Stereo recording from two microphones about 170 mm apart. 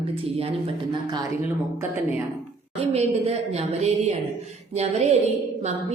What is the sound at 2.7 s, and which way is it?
A woman's voice, 35° right (ahead or behind).